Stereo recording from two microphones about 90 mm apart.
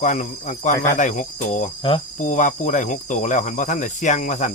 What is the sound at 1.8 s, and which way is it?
Cricket, 70° left (ahead or behind).